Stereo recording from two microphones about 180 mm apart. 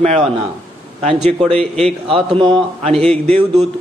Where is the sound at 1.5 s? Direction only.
5° left (ahead or behind).